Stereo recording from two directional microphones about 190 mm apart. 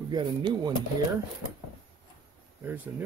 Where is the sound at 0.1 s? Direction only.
25° right (ahead or behind).